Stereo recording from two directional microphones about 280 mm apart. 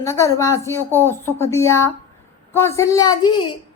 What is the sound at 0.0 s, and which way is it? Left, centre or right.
A woman's voice, centre.